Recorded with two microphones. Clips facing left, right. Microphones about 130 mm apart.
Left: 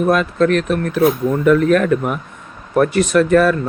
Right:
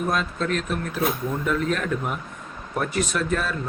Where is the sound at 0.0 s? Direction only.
70° left (ahead or behind).